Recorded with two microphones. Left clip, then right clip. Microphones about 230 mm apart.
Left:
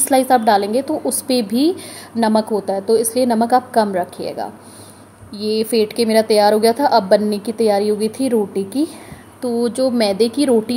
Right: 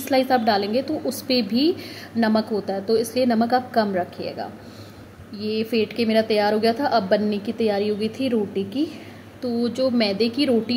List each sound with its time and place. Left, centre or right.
0.0 s a woman's voice: centre